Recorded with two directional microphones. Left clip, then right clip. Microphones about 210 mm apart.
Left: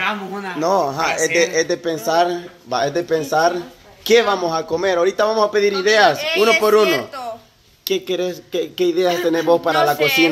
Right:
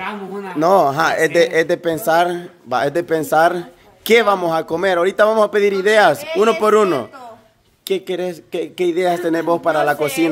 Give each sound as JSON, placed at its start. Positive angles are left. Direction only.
{"t": 0.6, "sound": "a man's voice", "side_deg": -50}
{"t": 7.8, "sound": "speech", "side_deg": -25}
{"t": 9.9, "sound": "speech", "side_deg": -5}